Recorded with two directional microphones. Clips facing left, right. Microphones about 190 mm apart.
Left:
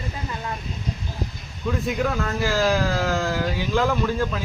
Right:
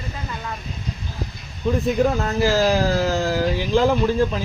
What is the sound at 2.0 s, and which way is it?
Speech, 30° right (ahead or behind).